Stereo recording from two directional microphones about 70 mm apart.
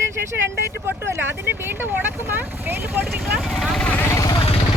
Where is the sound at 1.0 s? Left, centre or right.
Right.